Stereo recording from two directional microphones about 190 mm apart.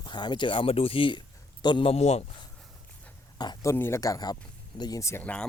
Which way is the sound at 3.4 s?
20° left (ahead or behind).